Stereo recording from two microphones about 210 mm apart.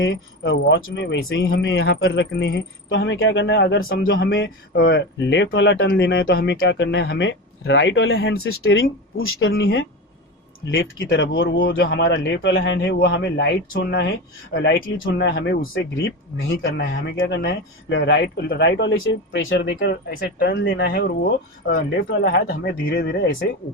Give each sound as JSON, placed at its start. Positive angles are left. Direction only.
{"t": 0.0, "sound": "speech", "side_deg": 60}
{"t": 2.3, "sound": "speech", "side_deg": 50}
{"t": 16.6, "sound": "speech", "side_deg": 50}
{"t": 20.7, "sound": "speech", "side_deg": 60}